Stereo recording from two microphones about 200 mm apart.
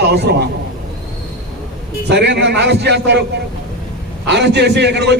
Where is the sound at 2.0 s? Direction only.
60° right (ahead or behind).